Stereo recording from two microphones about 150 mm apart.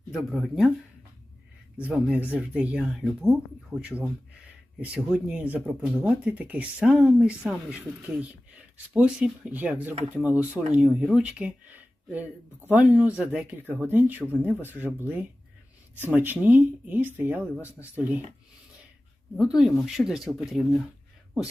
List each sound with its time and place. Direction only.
0.1 s speech: centre (ahead or behind)
1.9 s speech: 5° right (ahead or behind)
19.5 s speech: 5° right (ahead or behind)